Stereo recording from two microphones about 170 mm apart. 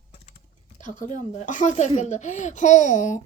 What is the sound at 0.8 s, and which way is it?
Speech, 50° left (ahead or behind).